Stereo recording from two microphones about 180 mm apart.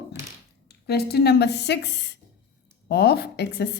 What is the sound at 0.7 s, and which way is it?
A woman's voice, 65° left (ahead or behind).